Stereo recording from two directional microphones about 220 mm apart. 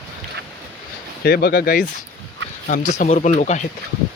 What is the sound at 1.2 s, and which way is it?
Speech, 45° left (ahead or behind).